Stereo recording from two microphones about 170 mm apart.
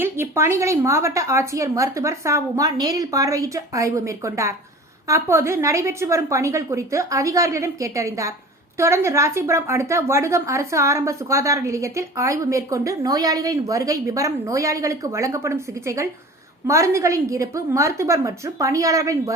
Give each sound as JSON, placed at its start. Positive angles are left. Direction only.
{"t": 0.0, "sound": "a woman's voice", "side_deg": -15}